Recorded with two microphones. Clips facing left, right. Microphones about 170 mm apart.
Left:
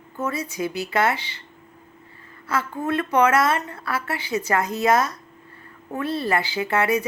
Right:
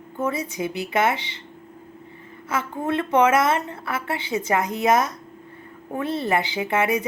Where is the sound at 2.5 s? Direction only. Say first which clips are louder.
Even; 20° right (ahead or behind).